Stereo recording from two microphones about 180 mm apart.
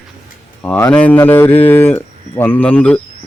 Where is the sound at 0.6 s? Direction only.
10° left (ahead or behind).